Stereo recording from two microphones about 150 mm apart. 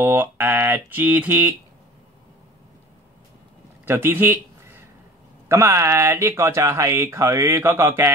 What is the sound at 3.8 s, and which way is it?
Speech, 15° right (ahead or behind).